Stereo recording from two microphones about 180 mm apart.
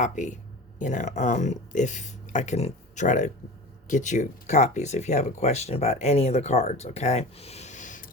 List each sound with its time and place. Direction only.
0.0 s speech: 40° left (ahead or behind)